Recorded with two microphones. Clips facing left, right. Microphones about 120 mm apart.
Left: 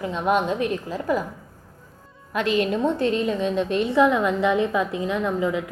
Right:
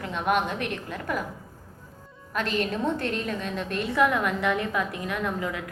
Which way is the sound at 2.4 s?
45° right (ahead or behind).